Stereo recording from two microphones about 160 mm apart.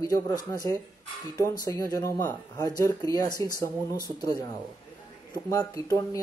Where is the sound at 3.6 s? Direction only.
20° left (ahead or behind).